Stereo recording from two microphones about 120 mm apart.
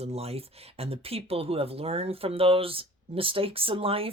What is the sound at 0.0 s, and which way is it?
Speech, 60° right (ahead or behind).